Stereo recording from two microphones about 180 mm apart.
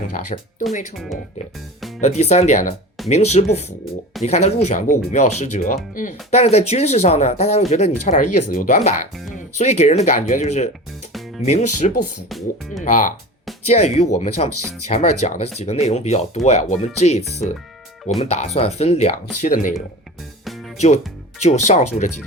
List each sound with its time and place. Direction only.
0.3 s speech: 40° left (ahead or behind)
0.9 s speech: centre (ahead or behind)
2.0 s speech: 35° left (ahead or behind)
6.3 s speech: 35° left (ahead or behind)
11.1 s music: centre (ahead or behind)
11.4 s speech: 40° left (ahead or behind)
20.4 s music: centre (ahead or behind)
20.7 s speech: 40° left (ahead or behind)